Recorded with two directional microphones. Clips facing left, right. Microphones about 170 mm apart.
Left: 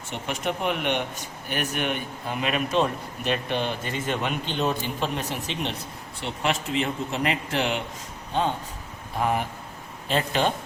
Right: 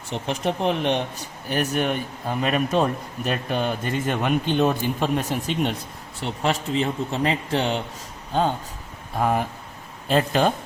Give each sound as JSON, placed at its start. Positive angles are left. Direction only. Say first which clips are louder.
{"t": 0.1, "sound": "speech", "louder": "right 4 dB", "side_deg": -30}
{"t": 9.2, "sound": "speech", "louder": "right 3 dB", "side_deg": -40}